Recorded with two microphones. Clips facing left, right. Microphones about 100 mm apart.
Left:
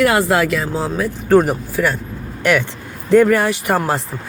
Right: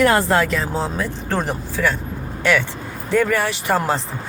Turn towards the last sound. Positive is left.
turn(degrees=10)  # may be behind; listen again after turning